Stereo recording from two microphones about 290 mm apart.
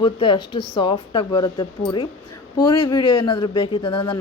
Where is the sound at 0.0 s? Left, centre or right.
Centre.